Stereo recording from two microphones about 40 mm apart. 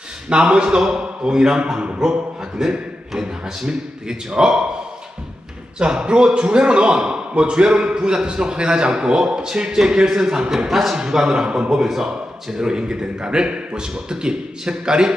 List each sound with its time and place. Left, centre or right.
0.3 s a man's voice: right
5.8 s a man's voice: right
10.7 s speech: centre
10.9 s a man's voice: centre
11.4 s a man's voice: right
11.7 s a man's voice: centre
12.0 s a man's voice: centre